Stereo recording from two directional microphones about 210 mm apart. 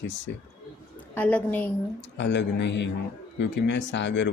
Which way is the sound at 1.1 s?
5° left (ahead or behind).